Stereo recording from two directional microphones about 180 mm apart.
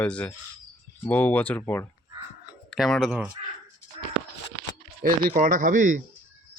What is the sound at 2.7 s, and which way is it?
Speech, centre (ahead or behind).